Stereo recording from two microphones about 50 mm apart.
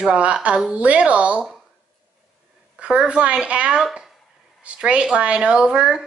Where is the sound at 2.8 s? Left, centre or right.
Right.